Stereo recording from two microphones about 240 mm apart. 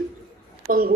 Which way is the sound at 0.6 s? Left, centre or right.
Right.